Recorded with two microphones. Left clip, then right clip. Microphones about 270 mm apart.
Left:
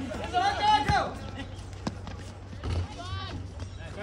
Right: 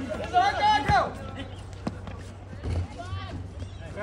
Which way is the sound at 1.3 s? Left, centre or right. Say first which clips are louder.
Right 2 dB; centre.